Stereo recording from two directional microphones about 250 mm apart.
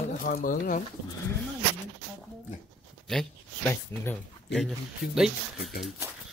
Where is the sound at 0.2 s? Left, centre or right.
Left.